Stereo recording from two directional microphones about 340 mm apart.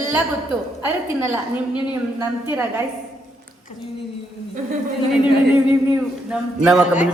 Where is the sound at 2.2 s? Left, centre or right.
Centre.